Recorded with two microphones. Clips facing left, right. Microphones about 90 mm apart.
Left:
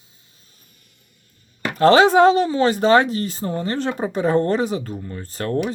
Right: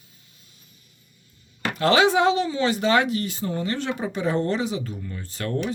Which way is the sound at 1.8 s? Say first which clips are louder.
Left 6 dB; 40° left (ahead or behind).